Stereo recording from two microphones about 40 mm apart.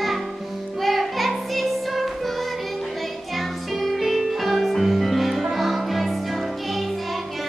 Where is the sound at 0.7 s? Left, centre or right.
Centre.